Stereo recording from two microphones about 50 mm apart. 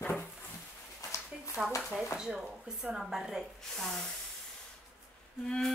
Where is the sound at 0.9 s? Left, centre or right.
Left.